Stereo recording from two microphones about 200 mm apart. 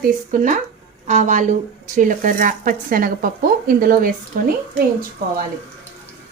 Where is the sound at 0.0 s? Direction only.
40° right (ahead or behind).